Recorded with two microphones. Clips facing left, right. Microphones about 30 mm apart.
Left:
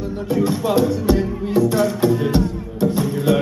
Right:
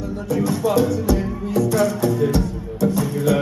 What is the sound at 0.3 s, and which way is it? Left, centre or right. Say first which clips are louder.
Music: left 1 dB; left.